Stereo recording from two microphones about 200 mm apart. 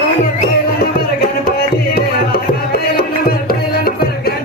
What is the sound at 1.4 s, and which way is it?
Music, 50° left (ahead or behind).